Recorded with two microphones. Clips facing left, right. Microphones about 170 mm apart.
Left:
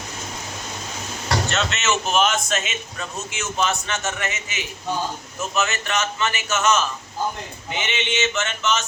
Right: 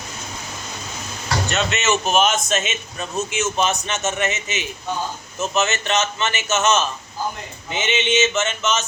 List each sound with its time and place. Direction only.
1.5 s a man's voice: 15° right (ahead or behind)